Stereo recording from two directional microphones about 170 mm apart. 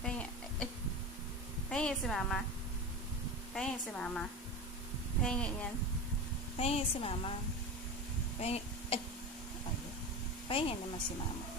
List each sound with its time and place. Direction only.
0.0 s chicken: 5° left (ahead or behind)
1.7 s a woman's voice: 5° left (ahead or behind)
3.5 s a woman's voice: 5° left (ahead or behind)
6.6 s a woman's voice: 35° left (ahead or behind)
8.4 s a sound: 35° left (ahead or behind)
10.5 s a woman's voice: 30° left (ahead or behind)